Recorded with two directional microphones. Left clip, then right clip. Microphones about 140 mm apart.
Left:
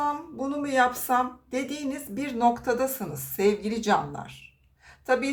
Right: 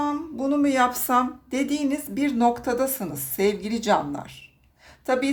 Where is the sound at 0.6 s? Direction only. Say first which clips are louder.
Even; 70° right (ahead or behind).